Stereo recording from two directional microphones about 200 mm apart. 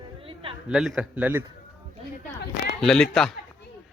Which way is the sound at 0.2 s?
25° right (ahead or behind).